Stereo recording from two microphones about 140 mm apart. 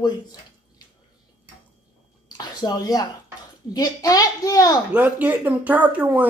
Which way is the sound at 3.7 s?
25° left (ahead or behind).